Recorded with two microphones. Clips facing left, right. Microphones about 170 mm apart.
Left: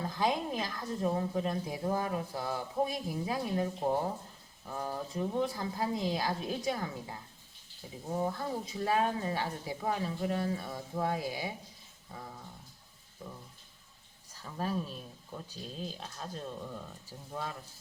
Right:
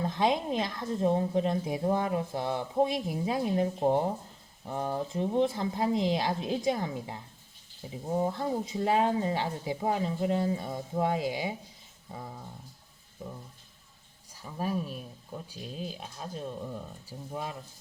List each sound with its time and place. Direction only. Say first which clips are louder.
0.0 s a woman's voice: right 4 dB; 20° right (ahead or behind)
13.2 s a woman's voice: right 4 dB; 20° right (ahead or behind)